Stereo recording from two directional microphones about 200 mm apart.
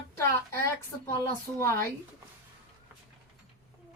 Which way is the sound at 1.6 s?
15° left (ahead or behind).